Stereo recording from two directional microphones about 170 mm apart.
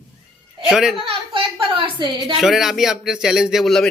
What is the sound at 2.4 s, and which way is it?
Speech, centre (ahead or behind).